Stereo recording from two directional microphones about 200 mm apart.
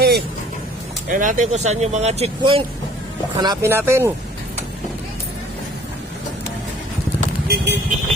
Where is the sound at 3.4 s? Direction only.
15° right (ahead or behind).